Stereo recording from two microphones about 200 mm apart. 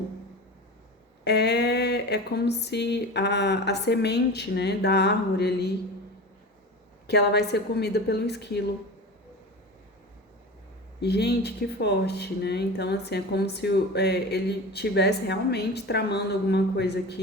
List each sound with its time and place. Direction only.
1.2 s speech: 55° left (ahead or behind)
7.1 s speech: 55° left (ahead or behind)
11.0 s speech: 55° left (ahead or behind)